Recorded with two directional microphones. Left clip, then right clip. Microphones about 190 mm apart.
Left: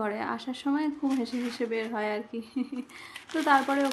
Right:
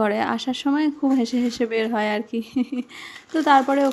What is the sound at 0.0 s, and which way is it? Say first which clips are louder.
Speech: right 10 dB; 40° right (ahead or behind).